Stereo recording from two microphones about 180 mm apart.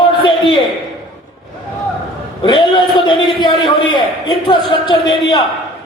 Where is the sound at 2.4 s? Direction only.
25° left (ahead or behind).